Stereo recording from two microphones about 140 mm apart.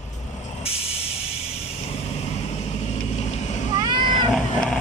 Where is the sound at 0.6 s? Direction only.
45° left (ahead or behind).